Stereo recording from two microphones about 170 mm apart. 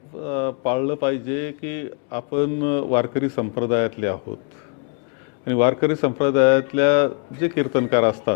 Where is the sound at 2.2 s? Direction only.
25° left (ahead or behind).